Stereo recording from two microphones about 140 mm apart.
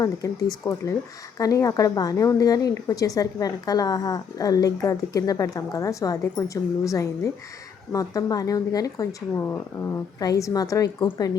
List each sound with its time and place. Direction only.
0.2 s a woman's voice: 25° left (ahead or behind)